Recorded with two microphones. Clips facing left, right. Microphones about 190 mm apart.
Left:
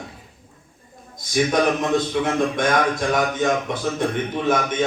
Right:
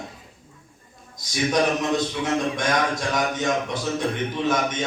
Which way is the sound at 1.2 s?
55° left (ahead or behind).